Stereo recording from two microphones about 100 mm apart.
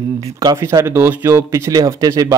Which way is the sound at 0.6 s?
30° right (ahead or behind).